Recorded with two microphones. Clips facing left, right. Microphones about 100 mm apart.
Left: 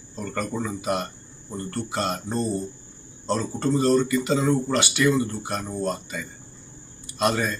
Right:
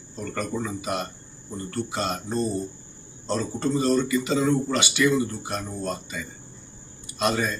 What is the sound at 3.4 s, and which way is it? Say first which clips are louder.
Speech: left 1 dB; 15° right (ahead or behind).